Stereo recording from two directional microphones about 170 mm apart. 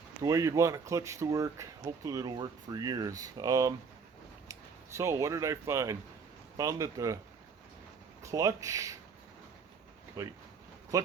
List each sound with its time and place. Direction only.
0.2 s speech: 20° right (ahead or behind)
8.2 s speech: 20° right (ahead or behind)
10.2 s speech: 20° right (ahead or behind)